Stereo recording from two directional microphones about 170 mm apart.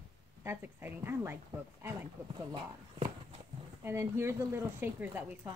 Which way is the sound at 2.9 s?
35° right (ahead or behind).